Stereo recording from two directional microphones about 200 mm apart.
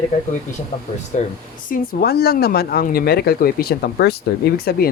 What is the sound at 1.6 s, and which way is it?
Speech, 45° left (ahead or behind).